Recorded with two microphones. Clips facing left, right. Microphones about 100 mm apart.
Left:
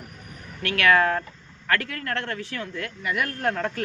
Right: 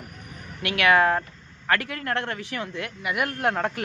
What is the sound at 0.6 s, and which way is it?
Speech, 15° right (ahead or behind).